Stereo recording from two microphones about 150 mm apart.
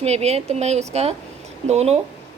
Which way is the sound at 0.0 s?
45° right (ahead or behind).